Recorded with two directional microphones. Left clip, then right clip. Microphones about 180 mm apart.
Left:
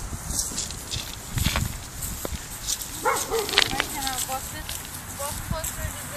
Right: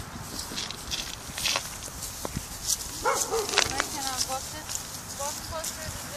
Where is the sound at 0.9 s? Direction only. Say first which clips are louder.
Left 1 dB; centre (ahead or behind).